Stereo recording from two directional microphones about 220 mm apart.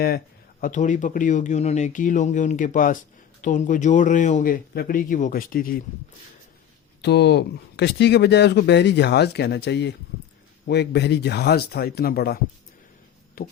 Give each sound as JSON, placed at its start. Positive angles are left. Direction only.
{"t": 0.6, "sound": "speech", "side_deg": 35}
{"t": 7.0, "sound": "speech", "side_deg": 50}